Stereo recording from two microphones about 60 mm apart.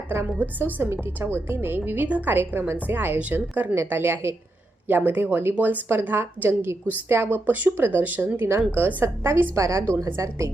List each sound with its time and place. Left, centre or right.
0.6 s a woman's voice: right
3.8 s a woman's voice: right
4.9 s a woman's voice: right
9.2 s a woman's voice: right
10.2 s a woman's voice: right